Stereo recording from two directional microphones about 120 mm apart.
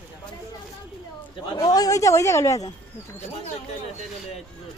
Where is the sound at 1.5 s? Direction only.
35° left (ahead or behind).